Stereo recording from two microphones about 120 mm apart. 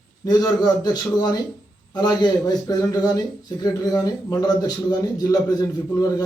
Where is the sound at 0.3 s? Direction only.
35° left (ahead or behind).